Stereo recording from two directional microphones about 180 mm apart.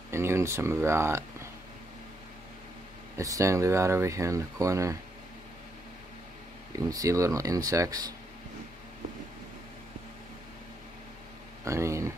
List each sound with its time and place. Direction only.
0.1 s a sound: 15° right (ahead or behind)
3.2 s speech: 15° right (ahead or behind)
6.9 s speech: 20° right (ahead or behind)
11.6 s speech: 15° right (ahead or behind)